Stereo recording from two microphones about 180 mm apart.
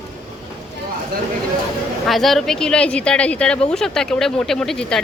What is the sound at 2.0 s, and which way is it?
Speech, centre (ahead or behind).